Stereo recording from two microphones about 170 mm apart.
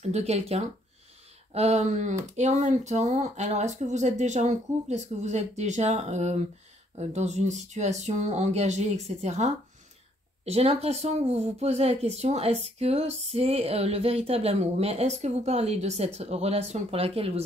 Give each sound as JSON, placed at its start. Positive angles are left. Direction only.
{"t": 0.1, "sound": "speech", "side_deg": -40}